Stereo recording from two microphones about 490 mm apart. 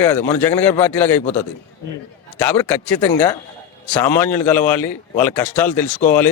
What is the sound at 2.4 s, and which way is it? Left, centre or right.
A man's voice, centre.